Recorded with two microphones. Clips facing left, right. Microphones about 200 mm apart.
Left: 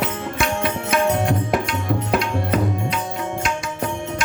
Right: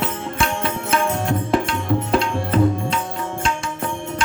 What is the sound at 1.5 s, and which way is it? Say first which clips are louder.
Tabla: right 2 dB; 30° right (ahead or behind).